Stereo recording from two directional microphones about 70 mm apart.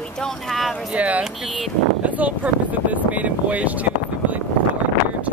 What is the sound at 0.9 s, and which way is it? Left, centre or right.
Speech, centre.